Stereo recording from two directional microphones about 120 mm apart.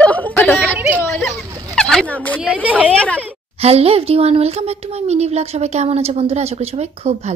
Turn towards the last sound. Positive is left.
turn(degrees=-60)  # may be behind; listen again after turning